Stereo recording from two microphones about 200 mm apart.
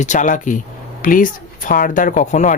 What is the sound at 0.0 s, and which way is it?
Speech, 35° left (ahead or behind).